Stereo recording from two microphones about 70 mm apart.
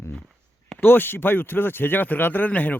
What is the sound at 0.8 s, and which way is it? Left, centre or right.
A man's voice, left.